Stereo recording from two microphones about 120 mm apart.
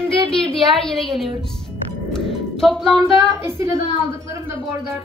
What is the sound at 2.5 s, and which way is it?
Speech, 5° left (ahead or behind).